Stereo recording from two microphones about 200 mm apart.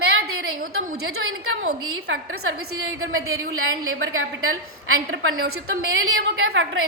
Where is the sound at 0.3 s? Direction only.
90° right.